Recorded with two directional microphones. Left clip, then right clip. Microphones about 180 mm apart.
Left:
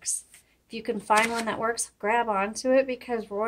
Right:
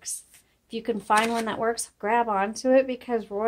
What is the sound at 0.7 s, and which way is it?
Speech, 30° right (ahead or behind).